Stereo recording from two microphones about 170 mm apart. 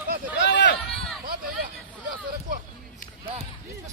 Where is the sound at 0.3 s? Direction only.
90° left.